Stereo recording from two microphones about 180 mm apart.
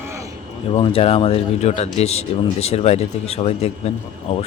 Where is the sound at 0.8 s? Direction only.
30° left (ahead or behind).